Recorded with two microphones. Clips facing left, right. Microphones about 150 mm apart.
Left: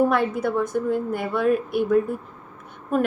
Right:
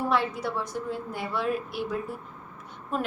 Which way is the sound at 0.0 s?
50° left (ahead or behind).